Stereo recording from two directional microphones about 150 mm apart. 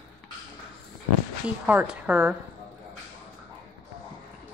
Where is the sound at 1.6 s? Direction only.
10° right (ahead or behind).